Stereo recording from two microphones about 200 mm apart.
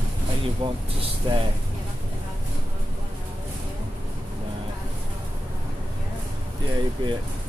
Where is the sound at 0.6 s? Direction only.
25° right (ahead or behind).